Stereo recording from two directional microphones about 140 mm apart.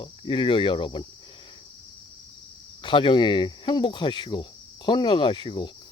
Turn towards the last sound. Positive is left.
turn(degrees=35)  # may be behind; listen again after turning